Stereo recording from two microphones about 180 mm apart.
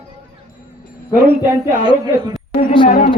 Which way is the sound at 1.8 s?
20° right (ahead or behind).